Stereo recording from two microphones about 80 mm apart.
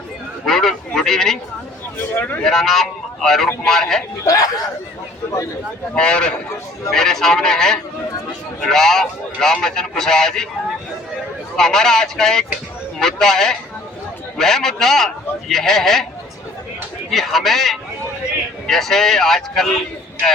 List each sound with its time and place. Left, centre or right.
0.4 s a sound: centre
2.1 s speech: left
2.4 s a man's voice: centre
4.2 s speech: left
5.9 s a man's voice: centre
11.5 s a man's voice: centre
17.1 s a man's voice: centre